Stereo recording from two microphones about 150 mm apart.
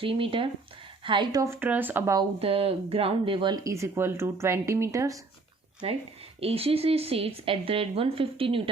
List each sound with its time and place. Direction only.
0.0 s a woman's voice: 35° right (ahead or behind)
1.5 s speech: 10° right (ahead or behind)
2.4 s speech: 40° right (ahead or behind); by 5.2 s 20° right (ahead or behind)
6.4 s a woman's voice: 40° right (ahead or behind)